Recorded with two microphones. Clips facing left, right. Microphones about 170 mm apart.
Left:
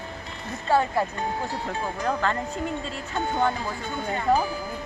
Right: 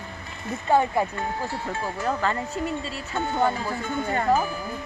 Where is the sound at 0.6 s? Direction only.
15° right (ahead or behind).